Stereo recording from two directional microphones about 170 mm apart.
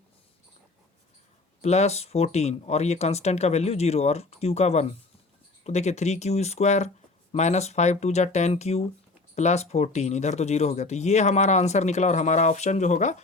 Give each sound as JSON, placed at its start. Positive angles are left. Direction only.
{"t": 1.6, "sound": "speech", "side_deg": 40}